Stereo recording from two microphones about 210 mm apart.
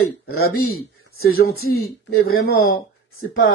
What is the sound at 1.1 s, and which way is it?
Speech, 45° left (ahead or behind).